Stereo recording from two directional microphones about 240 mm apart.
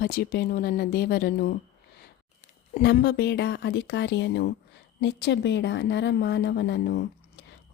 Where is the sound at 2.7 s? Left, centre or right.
Left.